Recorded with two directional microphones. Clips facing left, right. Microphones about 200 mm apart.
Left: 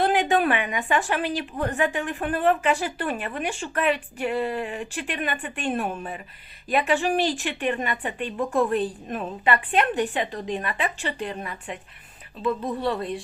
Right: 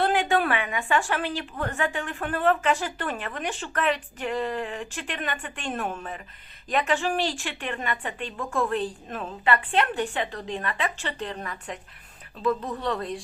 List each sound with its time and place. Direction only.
0.0 s a woman's voice: 15° left (ahead or behind)